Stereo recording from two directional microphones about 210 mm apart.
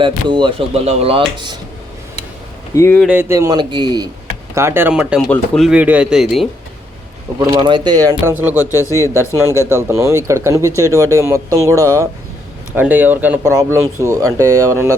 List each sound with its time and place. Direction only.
0.0 s speech: 20° right (ahead or behind)
2.7 s speech: 15° left (ahead or behind)
3.0 s speech: 10° right (ahead or behind)
7.3 s speech: 20° right (ahead or behind)
8.7 s speech: 15° left (ahead or behind)
9.5 s speech: 15° right (ahead or behind)